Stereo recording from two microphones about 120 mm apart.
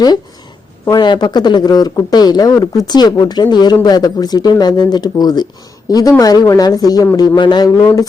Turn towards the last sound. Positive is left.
turn(degrees=35)  # may be behind; listen again after turning